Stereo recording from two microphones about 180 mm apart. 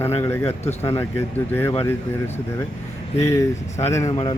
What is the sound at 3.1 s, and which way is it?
Speech, 15° left (ahead or behind).